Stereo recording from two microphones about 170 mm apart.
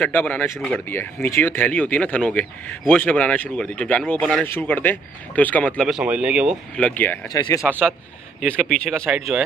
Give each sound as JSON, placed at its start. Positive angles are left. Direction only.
{"t": 0.0, "sound": "speech", "side_deg": 10}
{"t": 6.8, "sound": "speech", "side_deg": 10}
{"t": 7.2, "sound": "speech", "side_deg": 20}
{"t": 7.6, "sound": "a man's voice", "side_deg": 0}